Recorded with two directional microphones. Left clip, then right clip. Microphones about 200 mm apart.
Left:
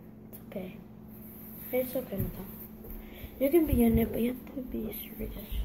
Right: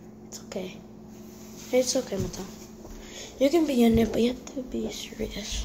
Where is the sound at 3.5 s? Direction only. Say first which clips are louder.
Right 1 dB; 15° right (ahead or behind).